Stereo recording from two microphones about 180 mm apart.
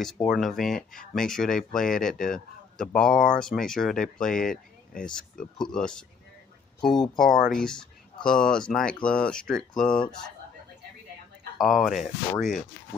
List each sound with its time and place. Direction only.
0.0 s speech: centre (ahead or behind)
11.5 s speech: centre (ahead or behind)